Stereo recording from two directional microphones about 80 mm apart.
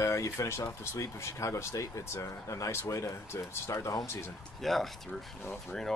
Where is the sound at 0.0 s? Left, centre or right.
Left.